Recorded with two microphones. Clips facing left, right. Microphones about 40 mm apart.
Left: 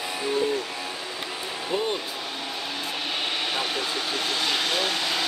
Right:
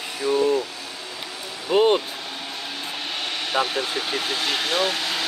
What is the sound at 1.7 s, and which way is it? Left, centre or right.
Speech, right.